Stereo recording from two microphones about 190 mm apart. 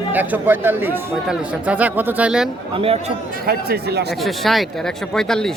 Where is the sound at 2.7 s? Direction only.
30° right (ahead or behind).